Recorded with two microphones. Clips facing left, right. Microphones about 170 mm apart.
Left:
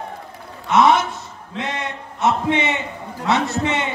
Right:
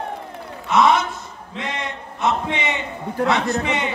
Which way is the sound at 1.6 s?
25° left (ahead or behind).